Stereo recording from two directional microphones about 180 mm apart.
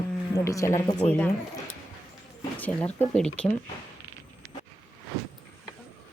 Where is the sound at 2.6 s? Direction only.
10° left (ahead or behind).